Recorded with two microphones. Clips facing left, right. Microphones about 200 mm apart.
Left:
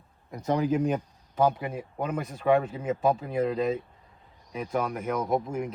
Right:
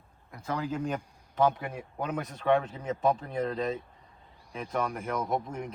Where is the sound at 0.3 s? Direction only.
20° left (ahead or behind).